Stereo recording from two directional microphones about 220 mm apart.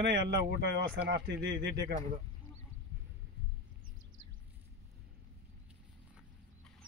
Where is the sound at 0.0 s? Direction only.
50° right (ahead or behind).